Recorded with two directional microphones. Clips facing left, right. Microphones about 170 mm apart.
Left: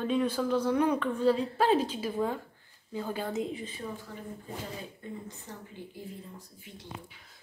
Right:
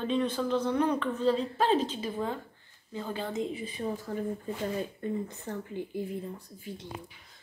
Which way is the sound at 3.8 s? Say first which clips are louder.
Right 8 dB; 35° right (ahead or behind).